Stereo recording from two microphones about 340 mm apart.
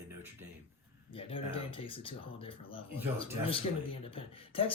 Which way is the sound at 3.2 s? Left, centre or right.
Centre.